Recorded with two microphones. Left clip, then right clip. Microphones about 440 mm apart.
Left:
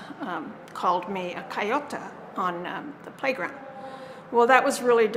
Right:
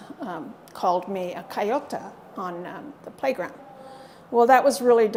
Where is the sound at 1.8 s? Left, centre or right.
Right.